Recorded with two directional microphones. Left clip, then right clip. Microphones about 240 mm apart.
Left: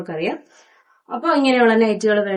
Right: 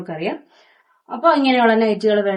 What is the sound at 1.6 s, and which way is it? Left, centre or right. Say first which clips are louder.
Speech: even; centre.